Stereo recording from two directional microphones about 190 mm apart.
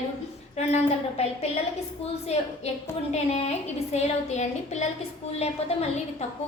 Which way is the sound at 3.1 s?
35° left (ahead or behind).